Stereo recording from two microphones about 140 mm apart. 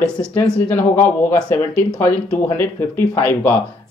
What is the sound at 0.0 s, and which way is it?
Speech, 15° left (ahead or behind).